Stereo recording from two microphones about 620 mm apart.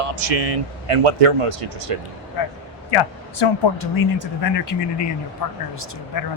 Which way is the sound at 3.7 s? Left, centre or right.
Left.